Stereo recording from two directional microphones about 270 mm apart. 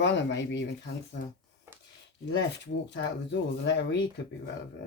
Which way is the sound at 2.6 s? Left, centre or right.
Left.